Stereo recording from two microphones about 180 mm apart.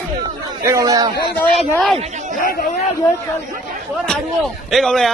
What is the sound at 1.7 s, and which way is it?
Speech, 5° left (ahead or behind).